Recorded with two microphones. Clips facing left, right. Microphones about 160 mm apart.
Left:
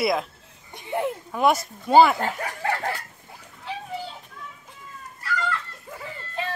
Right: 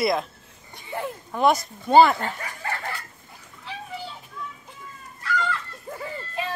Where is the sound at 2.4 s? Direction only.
65° left (ahead or behind).